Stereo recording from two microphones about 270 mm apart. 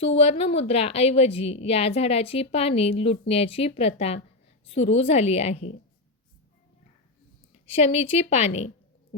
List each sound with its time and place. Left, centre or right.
0.2 s a woman's voice: left
7.7 s a woman's voice: left